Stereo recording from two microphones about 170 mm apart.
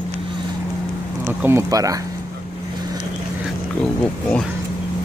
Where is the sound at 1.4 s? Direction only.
15° right (ahead or behind).